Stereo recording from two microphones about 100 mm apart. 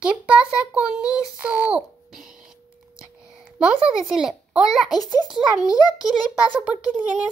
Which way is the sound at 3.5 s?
5° right (ahead or behind).